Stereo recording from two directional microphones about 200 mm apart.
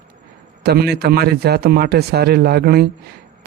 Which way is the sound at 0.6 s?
55° right (ahead or behind).